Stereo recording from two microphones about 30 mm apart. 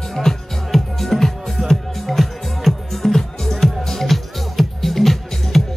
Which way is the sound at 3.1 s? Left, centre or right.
Centre.